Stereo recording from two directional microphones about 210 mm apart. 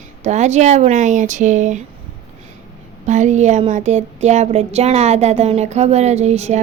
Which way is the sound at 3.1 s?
35° right (ahead or behind).